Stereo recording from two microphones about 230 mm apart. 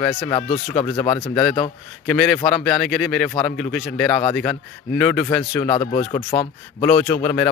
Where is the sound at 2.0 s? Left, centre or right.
Centre.